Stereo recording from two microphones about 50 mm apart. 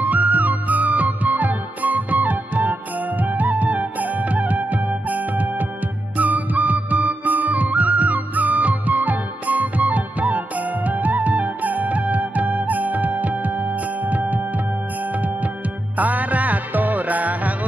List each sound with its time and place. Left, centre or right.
0.0 s music: right